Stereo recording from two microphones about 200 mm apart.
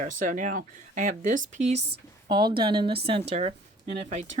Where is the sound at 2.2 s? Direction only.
20° right (ahead or behind).